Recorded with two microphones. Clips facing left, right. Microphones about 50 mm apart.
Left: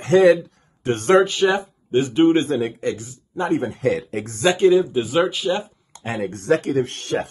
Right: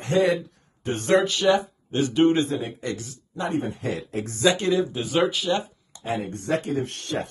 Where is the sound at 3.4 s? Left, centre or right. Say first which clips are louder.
Left 6 dB; left.